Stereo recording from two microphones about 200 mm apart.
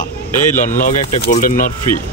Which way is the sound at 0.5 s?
40° left (ahead or behind).